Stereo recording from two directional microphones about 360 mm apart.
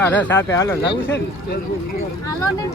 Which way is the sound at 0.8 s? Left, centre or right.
Left.